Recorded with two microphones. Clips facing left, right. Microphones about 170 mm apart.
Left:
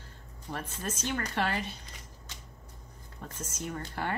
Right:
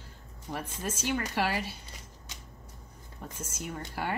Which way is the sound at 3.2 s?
10° right (ahead or behind).